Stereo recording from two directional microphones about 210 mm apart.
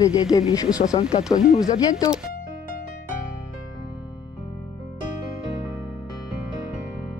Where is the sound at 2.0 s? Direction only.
5° right (ahead or behind).